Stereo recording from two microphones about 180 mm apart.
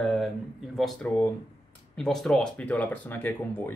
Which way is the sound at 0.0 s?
Centre (ahead or behind).